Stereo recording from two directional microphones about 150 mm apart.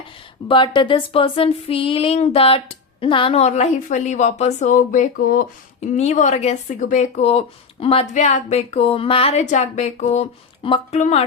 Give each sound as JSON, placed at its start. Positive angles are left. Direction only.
{"t": 0.4, "sound": "a sound", "side_deg": 35}
{"t": 6.0, "sound": "speech", "side_deg": 50}
{"t": 8.1, "sound": "speech", "side_deg": 55}